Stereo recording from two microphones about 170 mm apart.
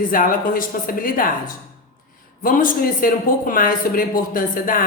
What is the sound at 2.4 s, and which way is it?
Speech, 55° left (ahead or behind).